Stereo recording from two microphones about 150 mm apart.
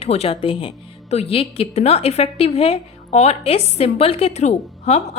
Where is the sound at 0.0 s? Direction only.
45° left (ahead or behind).